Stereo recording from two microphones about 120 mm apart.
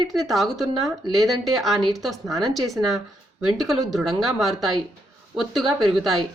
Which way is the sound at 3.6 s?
30° right (ahead or behind).